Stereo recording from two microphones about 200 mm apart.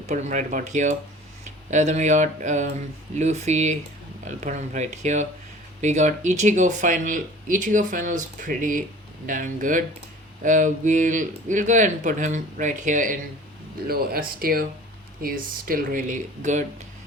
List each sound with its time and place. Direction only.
0.1 s speech: 35° right (ahead or behind)